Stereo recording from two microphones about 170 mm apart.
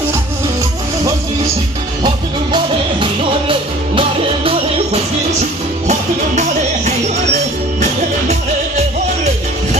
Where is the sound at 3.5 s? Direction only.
30° right (ahead or behind).